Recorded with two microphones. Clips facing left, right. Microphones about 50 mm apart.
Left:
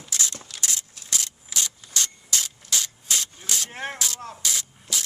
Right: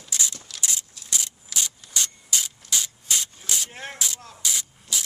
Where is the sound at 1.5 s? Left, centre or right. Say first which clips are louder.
Even; centre.